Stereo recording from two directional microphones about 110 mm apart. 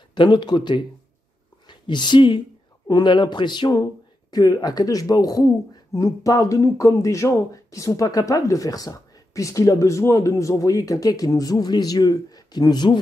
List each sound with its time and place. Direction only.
0.1 s speech: 45° left (ahead or behind)